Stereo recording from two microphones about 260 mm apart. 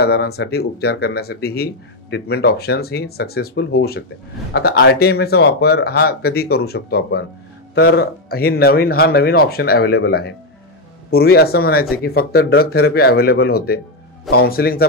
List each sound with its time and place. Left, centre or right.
0.0 s speech: left